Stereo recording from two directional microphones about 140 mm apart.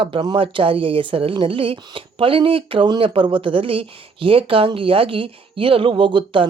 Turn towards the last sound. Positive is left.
turn(degrees=-35)  # may be behind; listen again after turning